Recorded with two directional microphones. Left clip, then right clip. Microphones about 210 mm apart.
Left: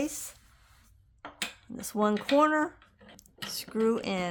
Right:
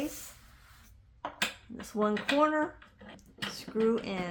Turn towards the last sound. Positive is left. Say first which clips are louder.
# left 1 dB
turn(degrees=45)  # may be behind; listen again after turning